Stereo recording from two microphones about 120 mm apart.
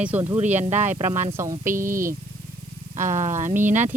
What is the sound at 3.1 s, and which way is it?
Speech, 90° right.